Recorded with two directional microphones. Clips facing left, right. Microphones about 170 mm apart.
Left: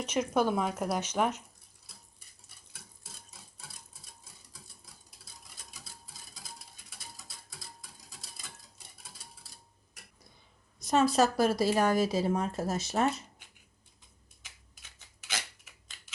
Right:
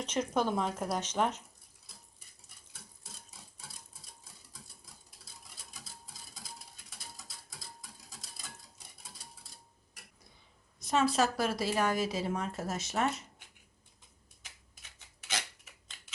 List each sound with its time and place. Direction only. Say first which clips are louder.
0.0 s speech: left 3 dB; 10° left (ahead or behind)
10.8 s speech: left 3 dB; 40° left (ahead or behind)